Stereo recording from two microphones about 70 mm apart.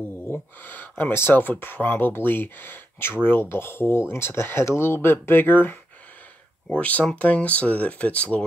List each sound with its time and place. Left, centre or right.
0.3 s speech: left